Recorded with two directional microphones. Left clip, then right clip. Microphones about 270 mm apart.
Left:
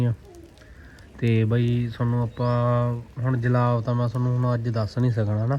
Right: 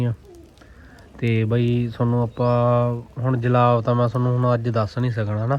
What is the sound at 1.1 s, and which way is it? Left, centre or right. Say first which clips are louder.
A man's voice: right 2 dB; centre.